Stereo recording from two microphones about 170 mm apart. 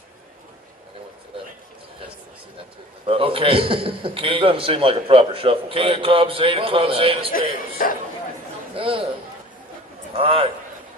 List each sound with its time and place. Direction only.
3.1 s a man's voice: 35° right (ahead or behind)
7.3 s a man's voice: 55° left (ahead or behind)
8.7 s a man's voice: 30° right (ahead or behind)
10.1 s a man's voice: 30° right (ahead or behind)